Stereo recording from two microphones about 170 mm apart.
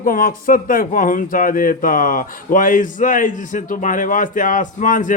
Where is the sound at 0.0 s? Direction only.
55° left (ahead or behind).